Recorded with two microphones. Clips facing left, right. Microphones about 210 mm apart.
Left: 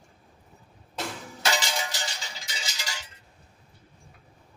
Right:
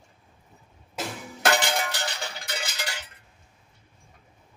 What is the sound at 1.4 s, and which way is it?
Music, 55° right (ahead or behind).